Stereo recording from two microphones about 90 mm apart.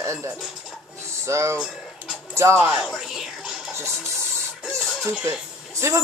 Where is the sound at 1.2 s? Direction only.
30° right (ahead or behind).